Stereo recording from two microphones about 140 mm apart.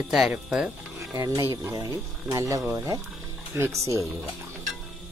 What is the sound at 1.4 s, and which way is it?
Speech, 20° right (ahead or behind).